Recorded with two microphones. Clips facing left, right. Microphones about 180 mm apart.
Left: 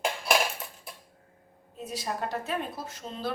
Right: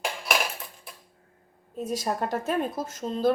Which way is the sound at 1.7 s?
45° right (ahead or behind).